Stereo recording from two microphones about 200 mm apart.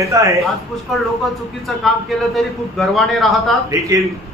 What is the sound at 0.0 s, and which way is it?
Speech, 15° right (ahead or behind).